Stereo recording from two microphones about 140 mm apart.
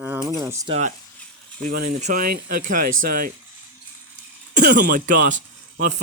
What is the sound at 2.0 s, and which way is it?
Speech, 85° right.